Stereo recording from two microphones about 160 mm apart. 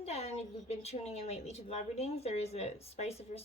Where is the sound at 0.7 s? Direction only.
40° left (ahead or behind).